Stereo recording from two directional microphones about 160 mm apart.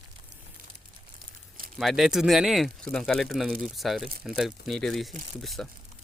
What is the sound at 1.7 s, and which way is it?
Speech, centre (ahead or behind).